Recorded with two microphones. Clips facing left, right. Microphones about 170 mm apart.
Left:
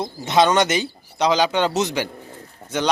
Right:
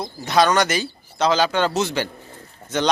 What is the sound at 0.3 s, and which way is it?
Speech, 20° left (ahead or behind).